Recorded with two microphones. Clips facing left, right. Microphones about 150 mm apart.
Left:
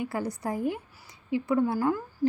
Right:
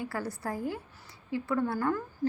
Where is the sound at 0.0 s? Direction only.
20° left (ahead or behind).